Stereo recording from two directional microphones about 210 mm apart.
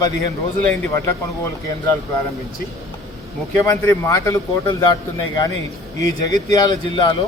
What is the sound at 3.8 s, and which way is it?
Speech, 10° left (ahead or behind).